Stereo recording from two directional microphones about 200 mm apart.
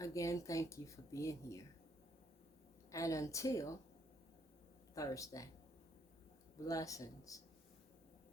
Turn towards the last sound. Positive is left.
turn(degrees=15)  # may be behind; listen again after turning